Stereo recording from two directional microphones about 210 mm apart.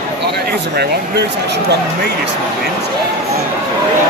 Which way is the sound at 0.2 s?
50° right (ahead or behind).